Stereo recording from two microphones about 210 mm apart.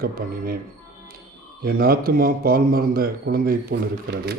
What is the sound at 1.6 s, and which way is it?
Speech, 45° right (ahead or behind).